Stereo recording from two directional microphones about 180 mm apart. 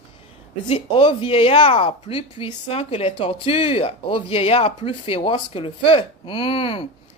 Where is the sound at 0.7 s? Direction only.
30° left (ahead or behind).